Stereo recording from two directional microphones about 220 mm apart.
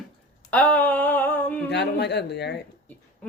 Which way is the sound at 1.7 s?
50° left (ahead or behind).